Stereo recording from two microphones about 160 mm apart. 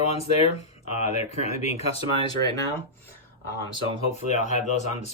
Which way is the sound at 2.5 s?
20° left (ahead or behind).